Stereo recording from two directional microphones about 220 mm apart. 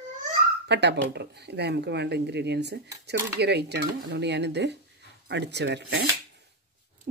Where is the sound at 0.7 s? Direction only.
50° right (ahead or behind).